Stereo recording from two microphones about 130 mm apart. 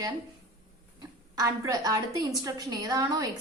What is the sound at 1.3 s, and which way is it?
A woman's voice, 25° right (ahead or behind).